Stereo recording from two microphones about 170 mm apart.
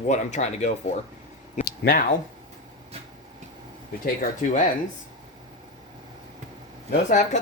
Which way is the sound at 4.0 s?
50° left (ahead or behind).